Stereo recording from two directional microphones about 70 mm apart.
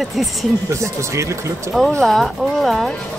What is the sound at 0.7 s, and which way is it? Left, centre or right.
Speech, right.